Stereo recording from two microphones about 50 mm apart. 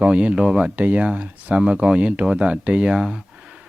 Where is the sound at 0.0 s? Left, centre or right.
Right.